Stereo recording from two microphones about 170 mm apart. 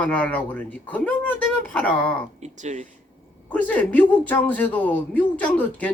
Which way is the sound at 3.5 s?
10° left (ahead or behind).